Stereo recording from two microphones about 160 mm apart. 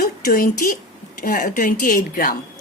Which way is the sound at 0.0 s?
60° left (ahead or behind).